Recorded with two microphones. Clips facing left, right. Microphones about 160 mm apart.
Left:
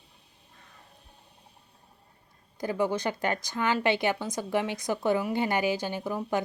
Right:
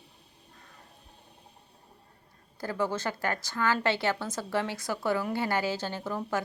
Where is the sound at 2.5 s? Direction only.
15° left (ahead or behind).